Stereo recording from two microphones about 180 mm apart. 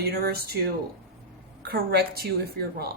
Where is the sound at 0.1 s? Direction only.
60° right (ahead or behind).